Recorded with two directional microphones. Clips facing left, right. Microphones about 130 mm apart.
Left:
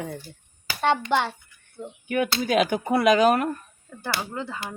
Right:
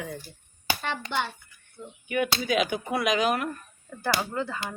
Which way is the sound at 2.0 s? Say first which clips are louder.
Left 2 dB; 45° left (ahead or behind).